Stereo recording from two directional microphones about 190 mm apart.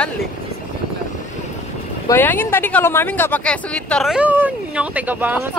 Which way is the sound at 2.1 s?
10° left (ahead or behind).